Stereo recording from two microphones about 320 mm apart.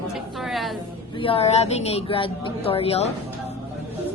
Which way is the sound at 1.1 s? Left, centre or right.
Centre.